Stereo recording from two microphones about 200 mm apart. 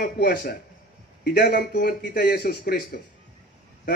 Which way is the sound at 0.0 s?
50° left (ahead or behind).